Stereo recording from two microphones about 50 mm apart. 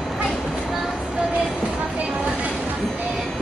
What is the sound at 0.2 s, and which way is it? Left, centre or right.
Train, centre.